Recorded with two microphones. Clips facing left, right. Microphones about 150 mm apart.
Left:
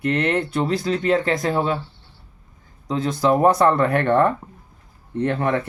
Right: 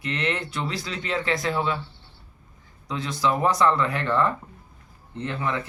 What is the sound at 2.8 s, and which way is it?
Speech, 45° left (ahead or behind).